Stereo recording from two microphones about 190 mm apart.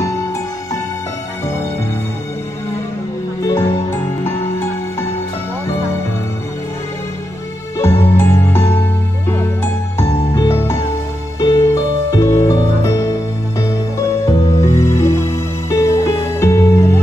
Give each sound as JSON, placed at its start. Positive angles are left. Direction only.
{"t": 3.4, "sound": "music", "side_deg": 15}
{"t": 7.8, "sound": "music", "side_deg": 10}
{"t": 14.2, "sound": "music", "side_deg": 15}